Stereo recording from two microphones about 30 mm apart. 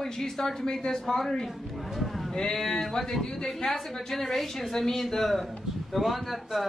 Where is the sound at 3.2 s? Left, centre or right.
Left; by 5.5 s centre.